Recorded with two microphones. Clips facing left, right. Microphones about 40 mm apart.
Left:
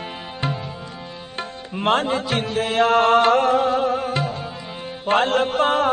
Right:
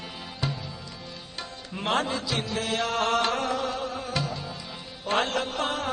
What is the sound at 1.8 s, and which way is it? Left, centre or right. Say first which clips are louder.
Chant: left 7 dB; left.